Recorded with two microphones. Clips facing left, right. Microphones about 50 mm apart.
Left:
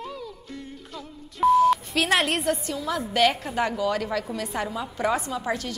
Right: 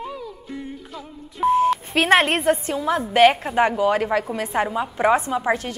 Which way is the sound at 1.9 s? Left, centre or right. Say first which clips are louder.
Right 6 dB; right.